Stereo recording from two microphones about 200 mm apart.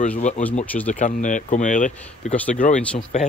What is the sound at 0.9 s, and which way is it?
Speech, 40° left (ahead or behind).